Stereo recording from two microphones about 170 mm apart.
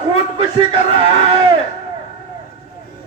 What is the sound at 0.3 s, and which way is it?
Speech, 35° right (ahead or behind).